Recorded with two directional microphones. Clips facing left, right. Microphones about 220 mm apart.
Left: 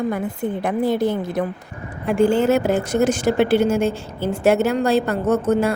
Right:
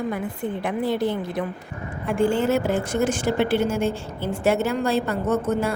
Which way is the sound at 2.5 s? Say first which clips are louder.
Left 4 dB; 40° left (ahead or behind).